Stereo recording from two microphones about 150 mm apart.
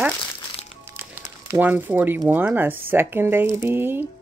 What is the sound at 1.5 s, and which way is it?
Speech, 15° right (ahead or behind).